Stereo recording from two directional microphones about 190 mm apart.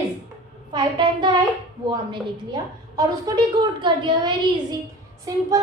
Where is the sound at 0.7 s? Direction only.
25° right (ahead or behind).